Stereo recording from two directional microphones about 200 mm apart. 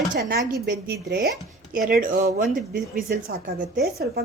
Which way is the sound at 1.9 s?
40° right (ahead or behind).